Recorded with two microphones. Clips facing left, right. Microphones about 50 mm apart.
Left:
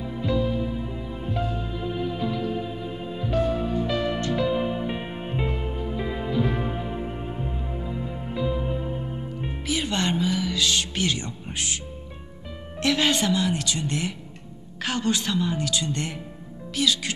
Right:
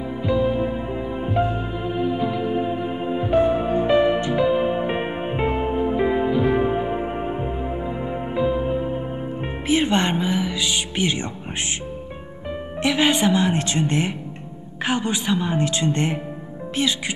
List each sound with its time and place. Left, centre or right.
0.2 s music: centre
9.4 s music: right
12.8 s speech: centre
14.9 s speech: centre